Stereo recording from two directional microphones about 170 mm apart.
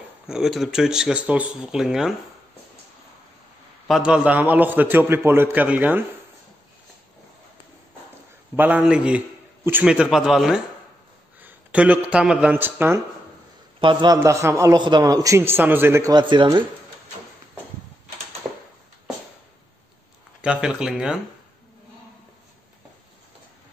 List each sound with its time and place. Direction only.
0.3 s speech: centre (ahead or behind)
3.8 s a man's voice: 5° right (ahead or behind)
8.5 s a man's voice: 10° right (ahead or behind)
13.7 s a man's voice: 25° right (ahead or behind)
20.4 s speech: 5° right (ahead or behind)